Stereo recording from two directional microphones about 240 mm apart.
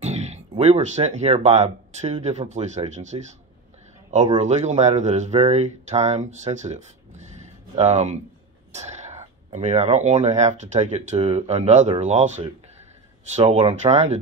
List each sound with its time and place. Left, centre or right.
0.0 s speech: right